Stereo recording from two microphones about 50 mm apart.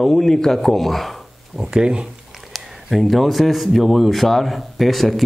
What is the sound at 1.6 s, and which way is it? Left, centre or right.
Speech, centre.